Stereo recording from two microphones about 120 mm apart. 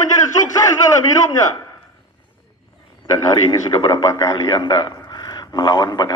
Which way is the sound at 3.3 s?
25° left (ahead or behind).